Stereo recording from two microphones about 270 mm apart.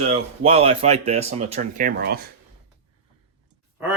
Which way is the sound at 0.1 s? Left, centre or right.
Right.